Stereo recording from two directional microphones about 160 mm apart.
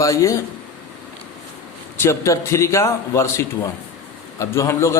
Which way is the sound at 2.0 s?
20° left (ahead or behind).